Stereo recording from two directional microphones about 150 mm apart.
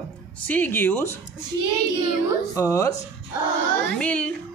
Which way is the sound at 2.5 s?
20° left (ahead or behind).